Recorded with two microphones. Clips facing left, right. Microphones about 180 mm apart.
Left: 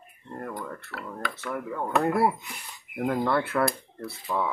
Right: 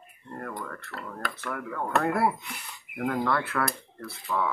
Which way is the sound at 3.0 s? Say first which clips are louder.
Left 2 dB; 25° left (ahead or behind).